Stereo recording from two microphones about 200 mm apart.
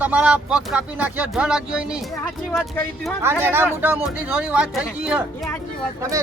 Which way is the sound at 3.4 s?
10° right (ahead or behind).